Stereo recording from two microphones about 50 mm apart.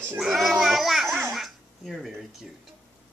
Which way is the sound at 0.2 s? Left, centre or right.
Centre.